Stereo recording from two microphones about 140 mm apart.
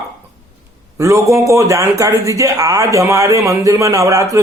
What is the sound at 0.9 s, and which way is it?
Speech, 20° right (ahead or behind).